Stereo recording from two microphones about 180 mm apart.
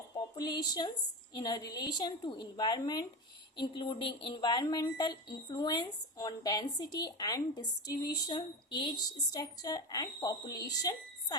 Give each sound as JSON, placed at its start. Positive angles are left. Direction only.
{"t": 0.3, "sound": "speech", "side_deg": 25}